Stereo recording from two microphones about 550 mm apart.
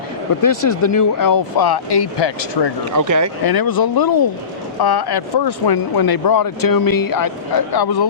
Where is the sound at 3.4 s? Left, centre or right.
Left.